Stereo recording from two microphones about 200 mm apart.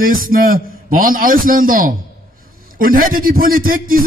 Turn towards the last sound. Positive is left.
turn(degrees=-45)  # may be behind; listen again after turning